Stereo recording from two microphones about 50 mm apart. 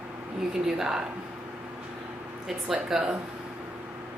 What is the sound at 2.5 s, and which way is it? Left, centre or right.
Speech, centre.